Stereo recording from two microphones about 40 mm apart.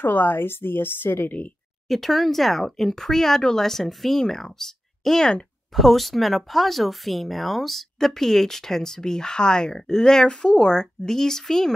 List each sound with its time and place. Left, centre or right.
0.0 s a woman's voice: left
1.9 s speech: centre